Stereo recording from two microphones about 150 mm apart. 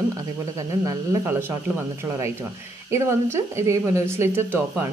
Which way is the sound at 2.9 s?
20° right (ahead or behind).